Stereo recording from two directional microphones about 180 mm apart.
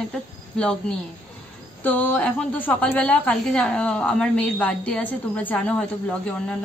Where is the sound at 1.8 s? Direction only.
10° left (ahead or behind).